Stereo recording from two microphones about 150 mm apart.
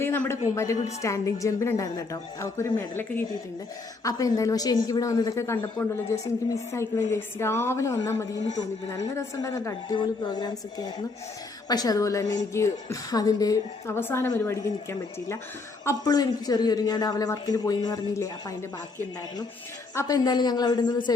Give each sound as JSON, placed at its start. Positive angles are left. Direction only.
{"t": 0.0, "sound": "a man's voice", "side_deg": 15}
{"t": 20.0, "sound": "a woman's voice", "side_deg": 25}